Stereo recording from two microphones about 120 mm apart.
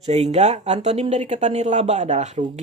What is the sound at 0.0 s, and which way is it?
Speech, 65° right (ahead or behind).